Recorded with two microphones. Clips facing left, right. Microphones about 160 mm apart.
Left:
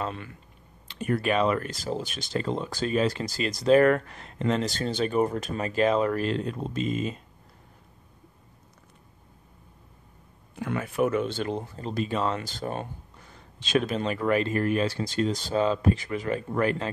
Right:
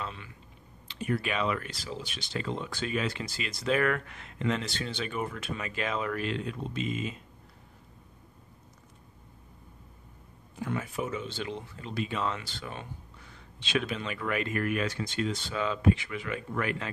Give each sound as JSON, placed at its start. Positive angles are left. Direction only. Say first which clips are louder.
{"t": 0.0, "sound": "speech", "louder": "left 7 dB", "side_deg": 50}
{"t": 10.5, "sound": "speech", "louder": "left 3 dB", "side_deg": 65}